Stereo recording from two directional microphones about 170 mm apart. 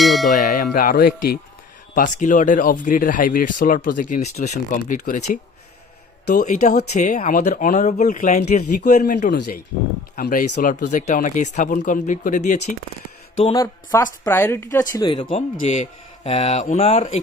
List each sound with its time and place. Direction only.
0.0 s a sound: centre (ahead or behind)
0.3 s speech: 45° left (ahead or behind); by 1.4 s 60° left (ahead or behind)
2.0 s speech: 50° left (ahead or behind)
13.5 s speech: 20° left (ahead or behind)
15.4 s speech: 40° left (ahead or behind)